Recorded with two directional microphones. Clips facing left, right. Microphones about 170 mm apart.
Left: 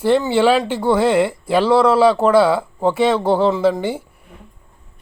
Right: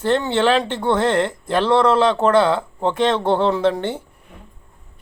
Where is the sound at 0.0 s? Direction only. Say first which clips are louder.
Left 3 dB; 10° left (ahead or behind).